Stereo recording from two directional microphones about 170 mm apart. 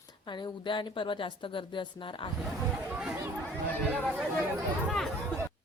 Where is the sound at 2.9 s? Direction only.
5° right (ahead or behind).